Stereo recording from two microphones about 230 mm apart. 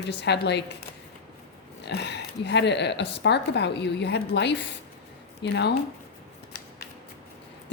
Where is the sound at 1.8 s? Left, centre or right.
Left.